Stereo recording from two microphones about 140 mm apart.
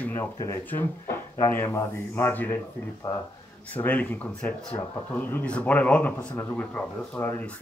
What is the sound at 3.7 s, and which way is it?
Speech, 10° left (ahead or behind).